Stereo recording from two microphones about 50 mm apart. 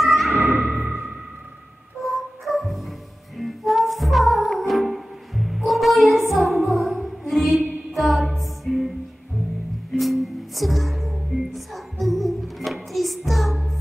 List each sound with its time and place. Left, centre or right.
0.0 s music: centre
0.3 s music: right
2.0 s music: centre
9.9 s music: centre